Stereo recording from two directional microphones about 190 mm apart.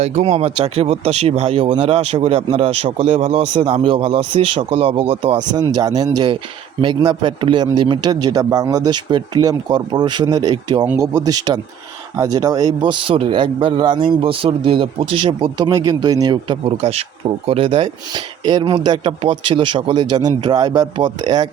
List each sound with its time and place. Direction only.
0.0 s speech: 35° right (ahead or behind)
5.7 s a man's voice: 20° right (ahead or behind)